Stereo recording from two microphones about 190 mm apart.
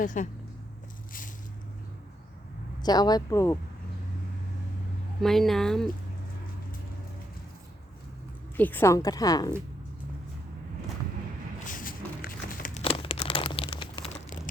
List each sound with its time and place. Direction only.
0.0 s speech: 40° left (ahead or behind)
2.8 s a woman's voice: 20° left (ahead or behind)
5.2 s speech: centre (ahead or behind)
8.5 s a woman's voice: 10° left (ahead or behind)
11.7 s a sound: 45° left (ahead or behind)
12.8 s a sound: 30° left (ahead or behind)